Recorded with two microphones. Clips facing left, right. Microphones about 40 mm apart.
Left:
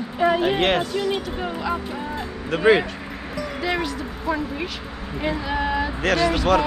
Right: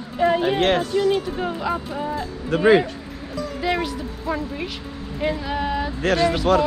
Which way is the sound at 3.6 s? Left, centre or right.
Centre.